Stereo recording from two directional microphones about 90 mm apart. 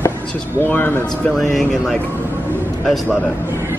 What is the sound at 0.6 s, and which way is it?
Speech, 20° left (ahead or behind).